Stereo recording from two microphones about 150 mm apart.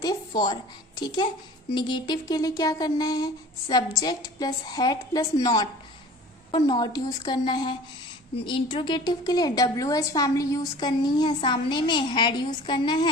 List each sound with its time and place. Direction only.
0.0 s a woman's voice: 25° left (ahead or behind)